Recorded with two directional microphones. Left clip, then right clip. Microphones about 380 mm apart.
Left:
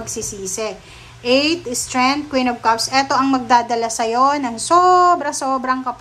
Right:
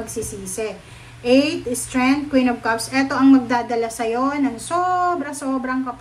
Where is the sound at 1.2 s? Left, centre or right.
Centre.